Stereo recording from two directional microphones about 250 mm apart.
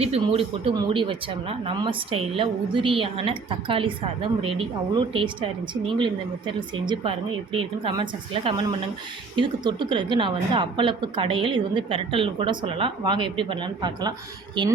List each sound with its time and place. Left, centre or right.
0.0 s speech: right